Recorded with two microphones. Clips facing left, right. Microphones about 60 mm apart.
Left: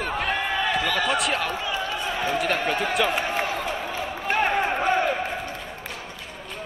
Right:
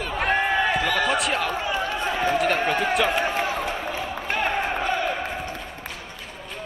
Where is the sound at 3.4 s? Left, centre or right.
Right.